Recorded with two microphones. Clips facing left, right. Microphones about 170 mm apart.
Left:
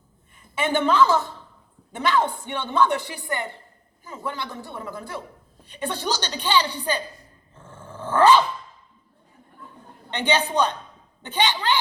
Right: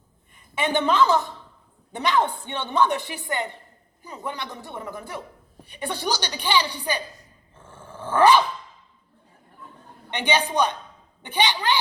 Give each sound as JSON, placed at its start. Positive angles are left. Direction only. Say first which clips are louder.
{"t": 0.3, "sound": "a woman's voice", "louder": "left 1 dB", "side_deg": -20}
{"t": 7.6, "sound": "dog", "louder": "left 1 dB", "side_deg": -10}
{"t": 10.1, "sound": "a woman's voice", "louder": "left 1 dB", "side_deg": -15}